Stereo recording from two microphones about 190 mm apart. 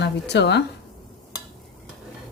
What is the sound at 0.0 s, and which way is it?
Speech, 65° left (ahead or behind).